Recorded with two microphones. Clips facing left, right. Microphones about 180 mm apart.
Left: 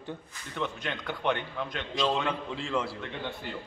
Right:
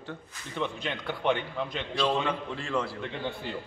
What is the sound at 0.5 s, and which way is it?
Speech, 10° right (ahead or behind).